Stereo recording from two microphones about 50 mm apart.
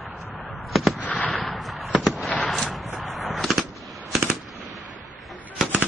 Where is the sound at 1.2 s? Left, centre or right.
Left.